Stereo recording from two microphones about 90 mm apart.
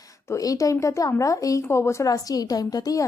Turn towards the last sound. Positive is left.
turn(degrees=45)  # may be behind; listen again after turning